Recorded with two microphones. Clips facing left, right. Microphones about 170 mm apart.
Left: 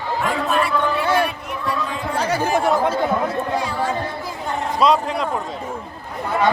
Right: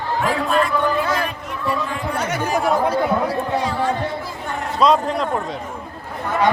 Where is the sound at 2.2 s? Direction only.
30° left (ahead or behind).